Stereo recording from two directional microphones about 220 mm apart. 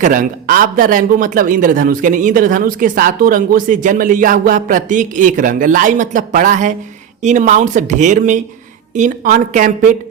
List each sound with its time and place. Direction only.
0.0 s speech: 40° right (ahead or behind)